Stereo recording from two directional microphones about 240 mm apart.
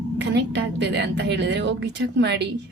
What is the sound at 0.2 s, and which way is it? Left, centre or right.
A woman's voice, right.